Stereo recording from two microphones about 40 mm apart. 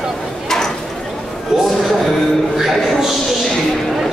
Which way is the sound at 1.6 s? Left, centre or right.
Centre.